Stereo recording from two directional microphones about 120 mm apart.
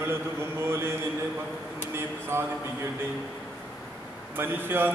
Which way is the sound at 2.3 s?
20° right (ahead or behind).